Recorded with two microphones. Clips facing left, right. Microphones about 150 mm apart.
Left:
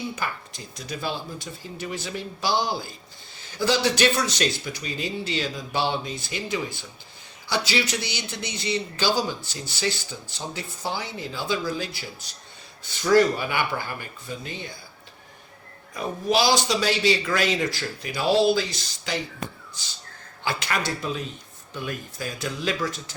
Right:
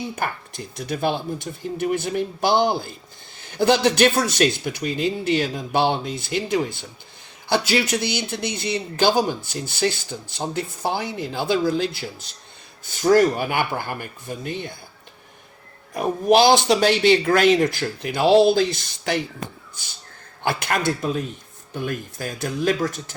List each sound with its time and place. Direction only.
0.2 s speech: 55° right (ahead or behind)
16.0 s speech: 60° right (ahead or behind)
20.4 s speech: 55° right (ahead or behind)